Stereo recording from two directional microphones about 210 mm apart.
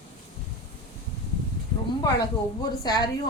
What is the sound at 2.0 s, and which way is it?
Speech, 20° left (ahead or behind).